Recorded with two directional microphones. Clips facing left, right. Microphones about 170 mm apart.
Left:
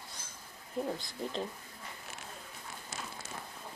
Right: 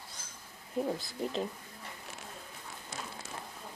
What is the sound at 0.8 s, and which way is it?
Speech, 5° right (ahead or behind).